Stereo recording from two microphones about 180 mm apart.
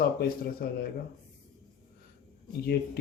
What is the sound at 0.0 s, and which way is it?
Speech, 55° left (ahead or behind).